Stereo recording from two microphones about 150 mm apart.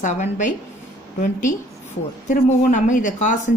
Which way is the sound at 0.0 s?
55° left (ahead or behind).